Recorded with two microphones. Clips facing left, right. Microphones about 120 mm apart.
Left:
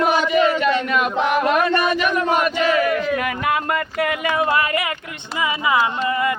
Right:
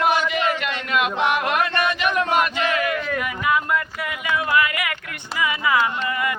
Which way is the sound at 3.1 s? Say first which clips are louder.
Left 1 dB; 60° left (ahead or behind).